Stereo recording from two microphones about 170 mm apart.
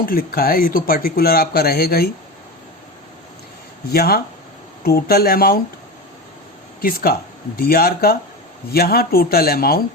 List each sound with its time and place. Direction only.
0.0 s speech: 60° left (ahead or behind)
3.9 s speech: 65° left (ahead or behind)
6.8 s speech: 60° left (ahead or behind)